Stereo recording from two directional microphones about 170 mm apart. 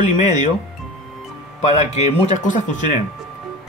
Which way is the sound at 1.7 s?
40° left (ahead or behind).